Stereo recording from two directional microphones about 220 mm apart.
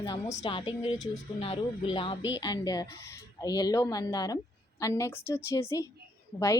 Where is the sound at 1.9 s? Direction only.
25° left (ahead or behind).